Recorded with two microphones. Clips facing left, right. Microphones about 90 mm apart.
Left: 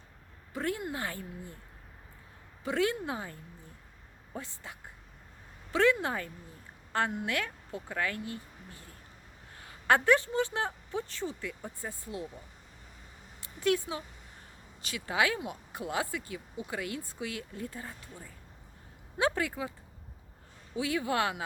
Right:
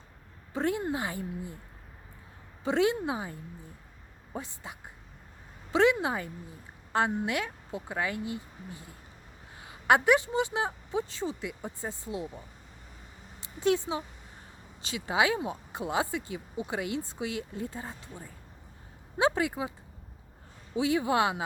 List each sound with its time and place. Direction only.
0.5 s speech: 25° right (ahead or behind)
2.6 s a woman's voice: 20° right (ahead or behind)
13.4 s speech: 20° right (ahead or behind)
20.7 s speech: 25° right (ahead or behind)